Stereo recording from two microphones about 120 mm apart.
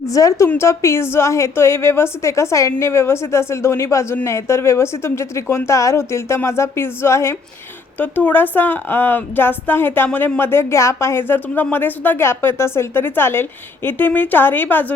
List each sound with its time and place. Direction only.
0.1 s a woman's voice: 25° left (ahead or behind)